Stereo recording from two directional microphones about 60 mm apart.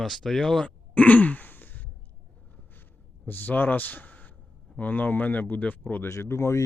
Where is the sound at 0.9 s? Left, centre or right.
Left.